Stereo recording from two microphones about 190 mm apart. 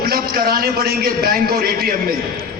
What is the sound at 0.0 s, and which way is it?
A man's voice, 50° right (ahead or behind).